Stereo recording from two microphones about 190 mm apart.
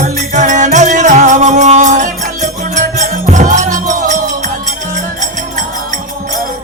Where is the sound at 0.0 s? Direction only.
40° right (ahead or behind).